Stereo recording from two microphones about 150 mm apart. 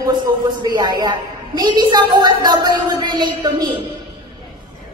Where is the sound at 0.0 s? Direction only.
30° right (ahead or behind).